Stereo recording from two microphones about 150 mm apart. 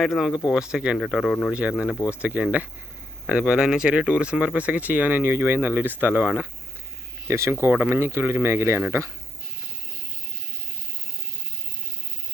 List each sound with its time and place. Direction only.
0.0 s speech: centre (ahead or behind); by 9.1 s 15° right (ahead or behind)